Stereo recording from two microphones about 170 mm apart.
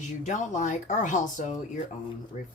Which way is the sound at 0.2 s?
45° left (ahead or behind).